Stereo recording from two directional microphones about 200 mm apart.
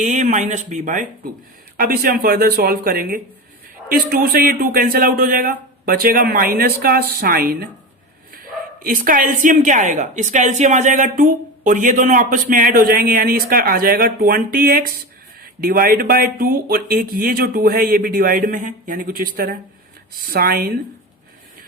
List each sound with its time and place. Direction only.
0.0 s a woman's voice: 35° right (ahead or behind)
8.8 s a woman's voice: 45° right (ahead or behind)